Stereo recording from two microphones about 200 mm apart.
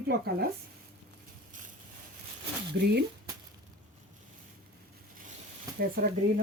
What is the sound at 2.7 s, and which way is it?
Speech, 55° right (ahead or behind).